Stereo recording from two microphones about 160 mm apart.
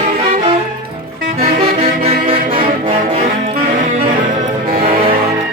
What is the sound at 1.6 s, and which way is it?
Music, 35° right (ahead or behind).